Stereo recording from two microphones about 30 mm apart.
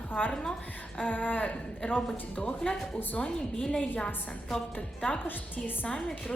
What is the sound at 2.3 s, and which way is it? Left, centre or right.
Speech, left.